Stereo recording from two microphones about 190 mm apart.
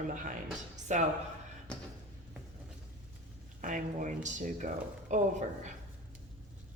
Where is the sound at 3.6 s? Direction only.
40° right (ahead or behind).